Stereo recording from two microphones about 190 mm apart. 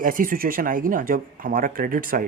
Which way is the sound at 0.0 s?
45° right (ahead or behind).